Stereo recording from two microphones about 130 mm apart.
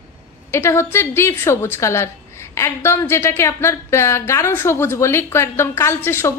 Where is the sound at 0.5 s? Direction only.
20° left (ahead or behind).